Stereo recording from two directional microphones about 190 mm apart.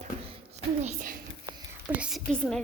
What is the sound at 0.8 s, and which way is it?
Speech, 45° right (ahead or behind).